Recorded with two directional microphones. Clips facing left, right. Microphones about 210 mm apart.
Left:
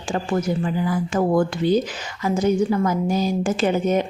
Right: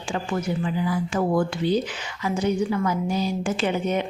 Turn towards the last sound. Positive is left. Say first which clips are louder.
# left 4 dB
turn(degrees=45)  # may be behind; listen again after turning